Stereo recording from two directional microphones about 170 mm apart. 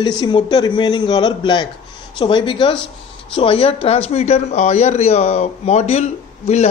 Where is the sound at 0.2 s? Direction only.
25° left (ahead or behind).